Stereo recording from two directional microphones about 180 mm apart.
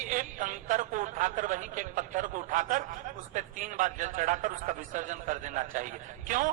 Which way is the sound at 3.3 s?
45° right (ahead or behind).